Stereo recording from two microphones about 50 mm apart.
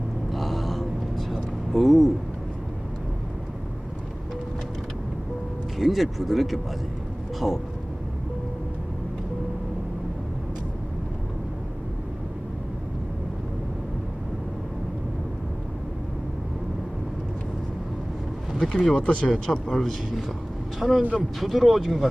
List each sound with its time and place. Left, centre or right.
0.3 s a sound: centre
1.7 s speech: centre
5.8 s speech: centre
18.6 s speech: centre
18.9 s speech: left
19.7 s speech: centre
21.0 s speech: right
21.4 s speech: centre